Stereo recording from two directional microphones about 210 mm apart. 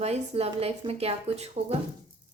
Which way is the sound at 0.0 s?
30° right (ahead or behind).